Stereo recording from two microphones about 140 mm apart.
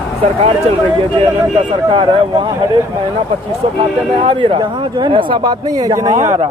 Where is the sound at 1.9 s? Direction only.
35° right (ahead or behind).